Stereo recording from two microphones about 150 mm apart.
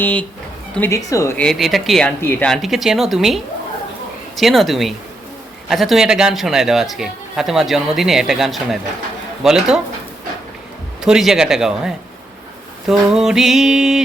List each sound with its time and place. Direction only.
0.0 s speech: 10° left (ahead or behind)
0.8 s a woman's voice: 20° left (ahead or behind)
1.4 s a man's voice: centre (ahead or behind)
2.5 s a man's voice: centre (ahead or behind)
11.0 s a man's voice: 5° right (ahead or behind)